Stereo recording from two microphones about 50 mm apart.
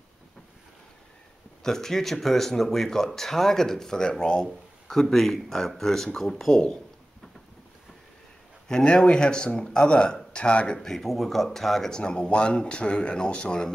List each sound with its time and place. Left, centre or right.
1.6 s speech: centre
8.6 s speech: centre
10.8 s speech: centre
12.0 s speech: left